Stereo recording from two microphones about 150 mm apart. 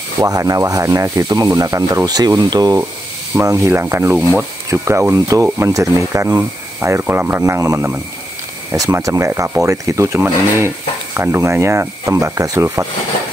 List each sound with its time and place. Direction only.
0.2 s speech: 25° right (ahead or behind)